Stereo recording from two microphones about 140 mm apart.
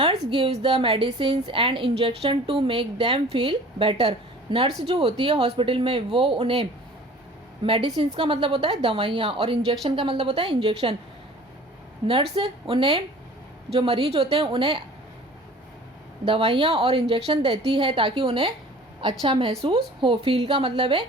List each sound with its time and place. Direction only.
0.0 s a woman's voice: 40° right (ahead or behind)
12.0 s a woman's voice: 40° right (ahead or behind)
16.2 s a woman's voice: 40° right (ahead or behind)